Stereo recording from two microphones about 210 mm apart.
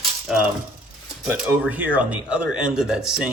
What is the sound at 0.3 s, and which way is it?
Speech, 5° right (ahead or behind).